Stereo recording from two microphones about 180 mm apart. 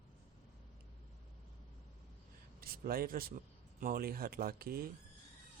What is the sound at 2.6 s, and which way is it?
A man's voice, 55° right (ahead or behind).